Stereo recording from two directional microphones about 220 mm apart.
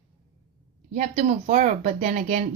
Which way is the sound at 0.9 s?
35° right (ahead or behind).